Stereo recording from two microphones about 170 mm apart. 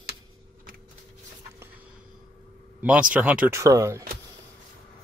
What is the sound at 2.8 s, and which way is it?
Speech, 5° right (ahead or behind).